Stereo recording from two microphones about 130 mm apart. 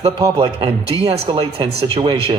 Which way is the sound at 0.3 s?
45° right (ahead or behind).